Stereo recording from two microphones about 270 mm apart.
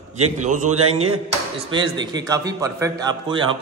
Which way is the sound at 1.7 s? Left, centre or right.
Centre.